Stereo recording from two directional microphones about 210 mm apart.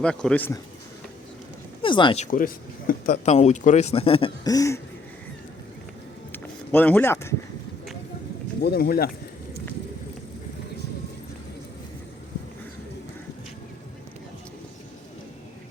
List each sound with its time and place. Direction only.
0.0 s speech: 5° left (ahead or behind)
1.8 s speech: 25° left (ahead or behind)
2.2 s speech: 40° left (ahead or behind); by 4.8 s 15° left (ahead or behind)
6.3 s speech: 10° left (ahead or behind)
8.6 s speech: 45° left (ahead or behind)